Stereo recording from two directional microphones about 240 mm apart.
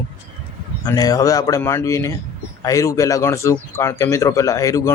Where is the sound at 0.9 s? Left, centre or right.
Centre.